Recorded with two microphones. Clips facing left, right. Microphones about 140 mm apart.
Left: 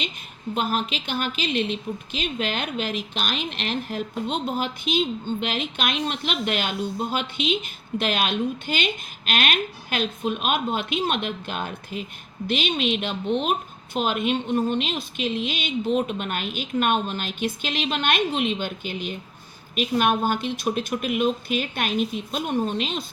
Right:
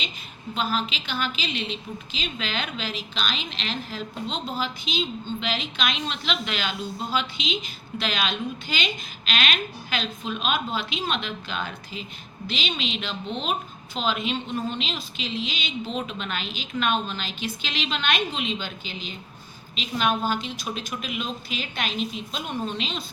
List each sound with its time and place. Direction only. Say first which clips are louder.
0.5 s a woman's voice: left 2 dB; 55° left (ahead or behind)